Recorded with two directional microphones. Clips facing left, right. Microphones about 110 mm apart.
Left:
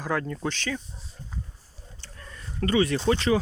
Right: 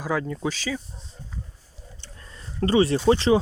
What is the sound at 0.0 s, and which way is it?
Speech, 5° right (ahead or behind).